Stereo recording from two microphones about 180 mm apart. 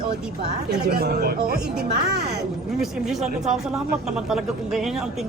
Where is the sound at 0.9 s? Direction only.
55° right (ahead or behind).